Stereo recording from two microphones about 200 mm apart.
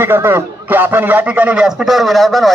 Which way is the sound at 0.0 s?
10° right (ahead or behind).